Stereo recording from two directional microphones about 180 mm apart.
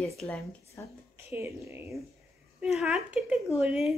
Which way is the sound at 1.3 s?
15° right (ahead or behind).